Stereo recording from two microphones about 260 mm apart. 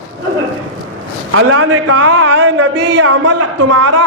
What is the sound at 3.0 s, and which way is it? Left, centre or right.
Speech, right.